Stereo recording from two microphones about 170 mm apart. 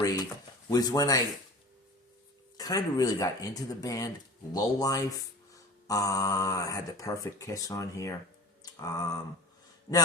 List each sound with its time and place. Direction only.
0.0 s speech: 20° left (ahead or behind)
2.6 s speech: 20° left (ahead or behind)
8.6 s a sound: 20° left (ahead or behind)